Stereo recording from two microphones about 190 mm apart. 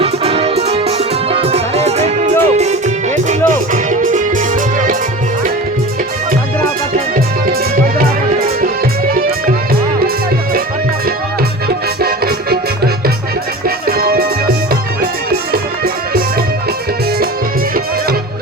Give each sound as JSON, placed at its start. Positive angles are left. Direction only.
{"t": 0.0, "sound": "music", "side_deg": -30}
{"t": 7.4, "sound": "music", "side_deg": -50}
{"t": 12.0, "sound": "music", "side_deg": -55}
{"t": 15.5, "sound": "music", "side_deg": -55}